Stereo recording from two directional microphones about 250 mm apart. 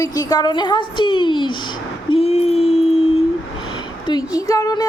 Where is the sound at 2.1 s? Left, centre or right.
Left.